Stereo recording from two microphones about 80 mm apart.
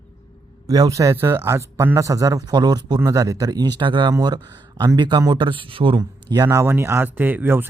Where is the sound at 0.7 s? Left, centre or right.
Right.